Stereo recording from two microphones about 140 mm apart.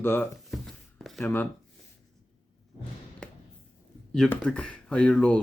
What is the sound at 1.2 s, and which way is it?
Speech, 15° left (ahead or behind).